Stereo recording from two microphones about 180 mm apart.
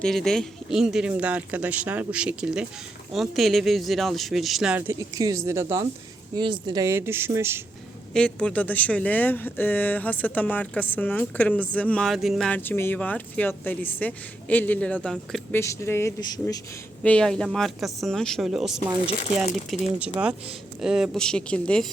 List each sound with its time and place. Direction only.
0.0 s speech: centre (ahead or behind)
4.9 s speech: 20° right (ahead or behind)
8.1 s speech: 5° left (ahead or behind)
15.6 s speech: 15° left (ahead or behind)
17.0 s speech: 5° left (ahead or behind)